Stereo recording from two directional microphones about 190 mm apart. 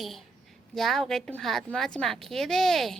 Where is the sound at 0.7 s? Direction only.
Centre (ahead or behind).